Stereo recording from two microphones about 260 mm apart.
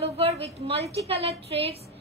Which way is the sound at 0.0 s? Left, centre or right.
Right.